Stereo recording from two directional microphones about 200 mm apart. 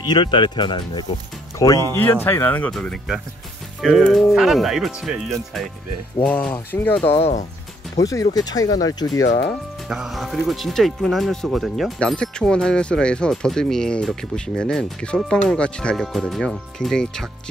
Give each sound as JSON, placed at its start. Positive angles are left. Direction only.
{"t": 0.0, "sound": "speech", "side_deg": 20}
{"t": 7.2, "sound": "speech", "side_deg": 30}
{"t": 7.9, "sound": "speech", "side_deg": 15}
{"t": 9.8, "sound": "speech", "side_deg": 0}